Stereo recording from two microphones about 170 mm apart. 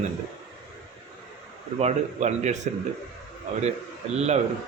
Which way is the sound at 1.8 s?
40° right (ahead or behind).